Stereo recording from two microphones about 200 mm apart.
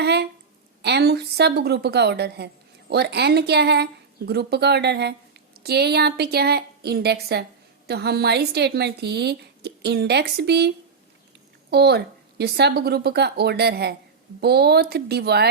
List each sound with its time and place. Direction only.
0.0 s a woman's voice: 55° right (ahead or behind)